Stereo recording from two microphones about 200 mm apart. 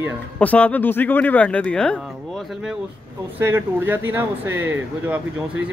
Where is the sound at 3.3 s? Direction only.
10° right (ahead or behind).